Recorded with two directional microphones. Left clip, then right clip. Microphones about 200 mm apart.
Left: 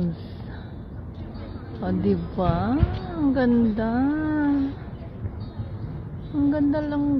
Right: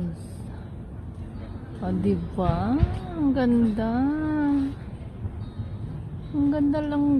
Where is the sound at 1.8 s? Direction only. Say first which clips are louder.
Left 2 dB; 10° right (ahead or behind).